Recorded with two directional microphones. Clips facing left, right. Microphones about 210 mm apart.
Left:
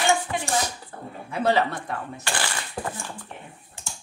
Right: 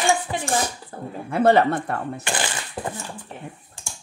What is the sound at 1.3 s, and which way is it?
Speech, 55° right (ahead or behind).